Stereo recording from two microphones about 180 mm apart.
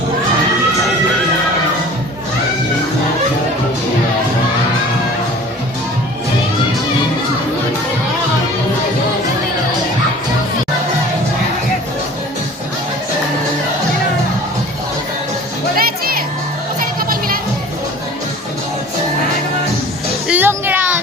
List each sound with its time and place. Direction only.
15.7 s music: 55° right (ahead or behind)
20.2 s music: 10° right (ahead or behind)